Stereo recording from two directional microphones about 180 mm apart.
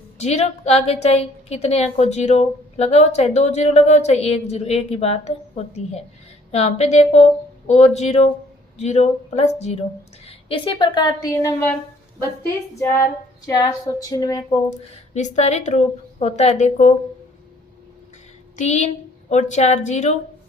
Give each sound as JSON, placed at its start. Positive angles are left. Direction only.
{"t": 0.2, "sound": "a woman's voice", "side_deg": 35}
{"t": 10.2, "sound": "a woman's voice", "side_deg": 25}
{"t": 12.8, "sound": "a sound", "side_deg": 15}
{"t": 13.5, "sound": "a woman's voice", "side_deg": 20}
{"t": 14.9, "sound": "a woman's voice", "side_deg": 40}
{"t": 18.5, "sound": "a woman's voice", "side_deg": 40}